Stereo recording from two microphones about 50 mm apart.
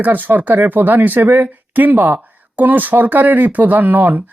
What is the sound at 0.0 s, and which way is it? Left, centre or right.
Speech, right.